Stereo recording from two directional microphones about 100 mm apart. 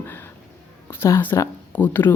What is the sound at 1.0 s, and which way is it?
Speech, 25° left (ahead or behind).